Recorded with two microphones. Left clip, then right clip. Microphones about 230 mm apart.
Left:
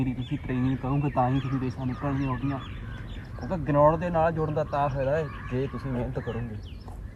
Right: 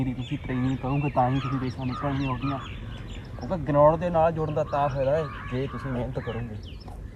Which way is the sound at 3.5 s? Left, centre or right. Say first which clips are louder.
Right 2 dB; centre.